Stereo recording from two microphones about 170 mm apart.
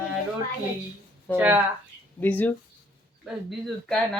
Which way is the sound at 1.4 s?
10° right (ahead or behind).